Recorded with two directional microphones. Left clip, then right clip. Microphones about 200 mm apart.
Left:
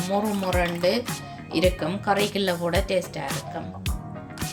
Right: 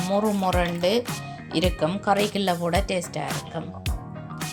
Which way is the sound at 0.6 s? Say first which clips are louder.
Even; 40° right (ahead or behind).